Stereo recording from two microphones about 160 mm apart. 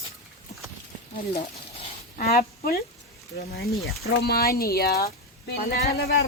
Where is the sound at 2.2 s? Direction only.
70° left (ahead or behind).